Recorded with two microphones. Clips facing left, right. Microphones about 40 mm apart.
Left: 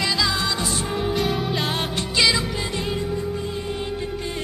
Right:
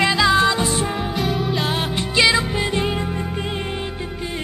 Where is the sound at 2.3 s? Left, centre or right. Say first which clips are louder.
Right 5 dB; right.